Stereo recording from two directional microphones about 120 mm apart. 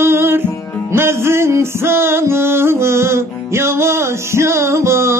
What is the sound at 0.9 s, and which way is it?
Music, 20° right (ahead or behind).